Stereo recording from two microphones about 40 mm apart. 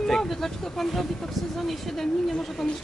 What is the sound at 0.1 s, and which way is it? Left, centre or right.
Speech, centre.